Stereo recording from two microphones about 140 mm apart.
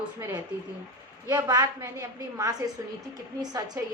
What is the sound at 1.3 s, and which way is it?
A woman's voice, 30° right (ahead or behind).